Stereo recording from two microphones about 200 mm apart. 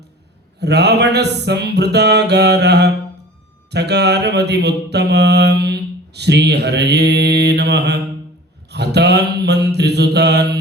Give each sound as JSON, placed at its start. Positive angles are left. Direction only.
{"t": 0.6, "sound": "mantra", "side_deg": -55}